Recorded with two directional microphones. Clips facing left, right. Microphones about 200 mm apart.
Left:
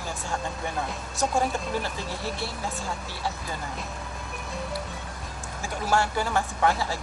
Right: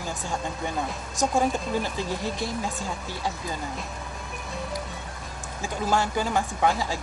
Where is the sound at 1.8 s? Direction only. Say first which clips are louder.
Right 3 dB; 15° right (ahead or behind).